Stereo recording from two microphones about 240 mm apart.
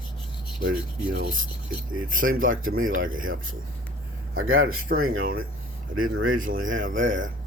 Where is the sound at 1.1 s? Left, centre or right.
Right.